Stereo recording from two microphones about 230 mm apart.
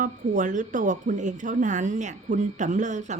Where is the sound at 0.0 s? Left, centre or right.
Right.